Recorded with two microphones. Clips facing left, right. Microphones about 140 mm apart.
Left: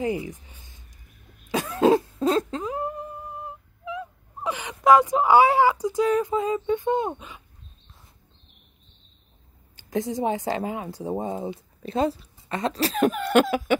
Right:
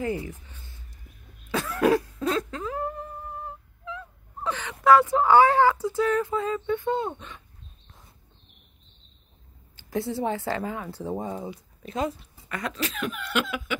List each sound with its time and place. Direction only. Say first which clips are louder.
0.0 s a sound: left 2 dB; 15° left (ahead or behind)
1.5 s cough: left 3 dB; 15° left (ahead or behind)
9.8 s a woman's voice: left 2 dB; 15° left (ahead or behind); by 13.7 s 40° left (ahead or behind)